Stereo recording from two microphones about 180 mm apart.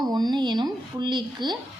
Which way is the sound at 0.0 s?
20° right (ahead or behind).